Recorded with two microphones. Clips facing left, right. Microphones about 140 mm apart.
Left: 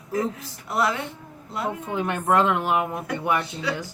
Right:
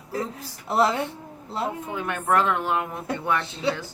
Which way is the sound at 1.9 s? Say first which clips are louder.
Left 3 dB; 20° left (ahead or behind).